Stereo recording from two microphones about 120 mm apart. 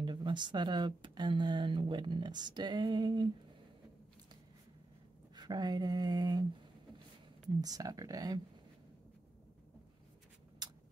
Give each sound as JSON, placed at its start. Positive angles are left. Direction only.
{"t": 0.0, "sound": "speech", "side_deg": -40}
{"t": 5.3, "sound": "speech", "side_deg": -35}
{"t": 7.4, "sound": "speech", "side_deg": -30}
{"t": 10.6, "sound": "a sound", "side_deg": -30}